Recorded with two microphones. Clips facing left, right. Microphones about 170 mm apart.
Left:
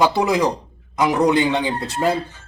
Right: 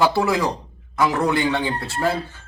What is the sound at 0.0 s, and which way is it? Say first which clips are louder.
A man's voice: left 2 dB; 20° left (ahead or behind).